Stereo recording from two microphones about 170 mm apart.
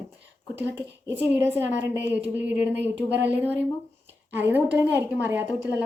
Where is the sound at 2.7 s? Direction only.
90° right.